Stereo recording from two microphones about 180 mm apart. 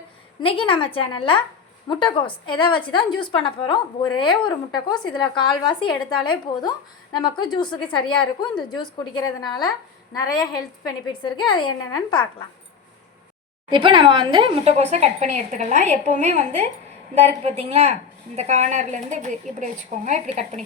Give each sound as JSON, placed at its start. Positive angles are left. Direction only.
{"t": 0.4, "sound": "a woman's voice", "side_deg": 30}
{"t": 10.8, "sound": "a woman's voice", "side_deg": 25}
{"t": 13.7, "sound": "speech", "side_deg": -30}